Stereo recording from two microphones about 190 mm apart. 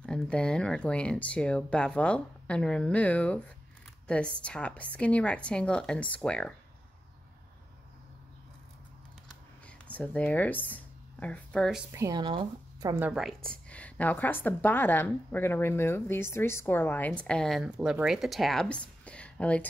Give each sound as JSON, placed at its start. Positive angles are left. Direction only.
{"t": 0.0, "sound": "speech", "side_deg": 5}
{"t": 4.4, "sound": "speech", "side_deg": 5}
{"t": 9.7, "sound": "speech", "side_deg": 5}
{"t": 11.9, "sound": "speech", "side_deg": -15}
{"t": 12.9, "sound": "speech", "side_deg": -5}